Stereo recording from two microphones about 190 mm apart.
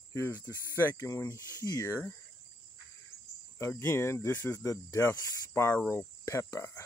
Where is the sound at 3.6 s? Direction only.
15° left (ahead or behind).